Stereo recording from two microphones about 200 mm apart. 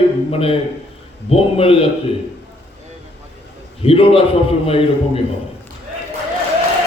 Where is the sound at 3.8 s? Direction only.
30° left (ahead or behind).